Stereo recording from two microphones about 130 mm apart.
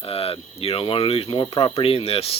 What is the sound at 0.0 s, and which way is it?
Speech, 45° left (ahead or behind).